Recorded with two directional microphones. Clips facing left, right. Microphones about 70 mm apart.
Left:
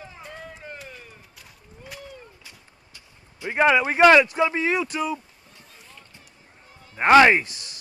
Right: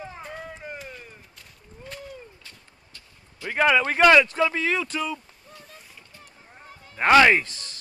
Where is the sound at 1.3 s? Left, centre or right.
Centre.